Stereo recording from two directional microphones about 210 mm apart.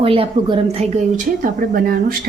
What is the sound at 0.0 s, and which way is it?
A woman's voice, 25° right (ahead or behind).